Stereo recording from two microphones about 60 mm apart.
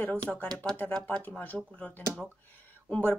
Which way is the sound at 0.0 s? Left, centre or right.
Left.